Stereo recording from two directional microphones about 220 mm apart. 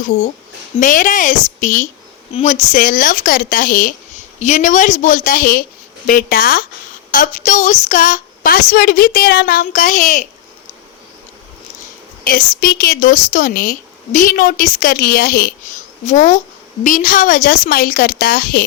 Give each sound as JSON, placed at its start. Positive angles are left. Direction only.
{"t": 0.8, "sound": "speech", "side_deg": 35}
{"t": 12.2, "sound": "speech", "side_deg": 40}